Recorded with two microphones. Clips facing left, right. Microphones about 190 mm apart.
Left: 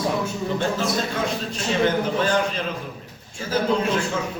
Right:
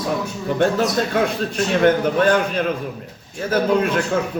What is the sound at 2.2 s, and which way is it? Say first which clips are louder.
Speech: right 5 dB; 60° right (ahead or behind).